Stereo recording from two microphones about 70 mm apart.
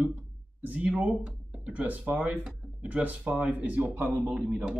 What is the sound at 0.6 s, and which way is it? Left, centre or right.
Speech, centre.